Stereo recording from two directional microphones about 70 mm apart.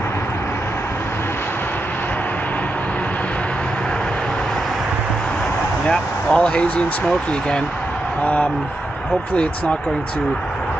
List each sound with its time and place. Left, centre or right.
5.9 s speech: centre
8.2 s speech: left